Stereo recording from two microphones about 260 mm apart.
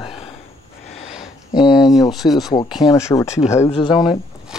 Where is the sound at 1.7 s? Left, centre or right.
Centre.